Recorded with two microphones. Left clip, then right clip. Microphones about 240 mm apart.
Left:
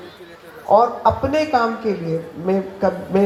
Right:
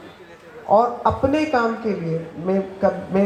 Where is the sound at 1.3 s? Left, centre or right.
Left.